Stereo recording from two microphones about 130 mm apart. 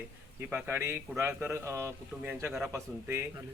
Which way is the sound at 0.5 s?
15° right (ahead or behind).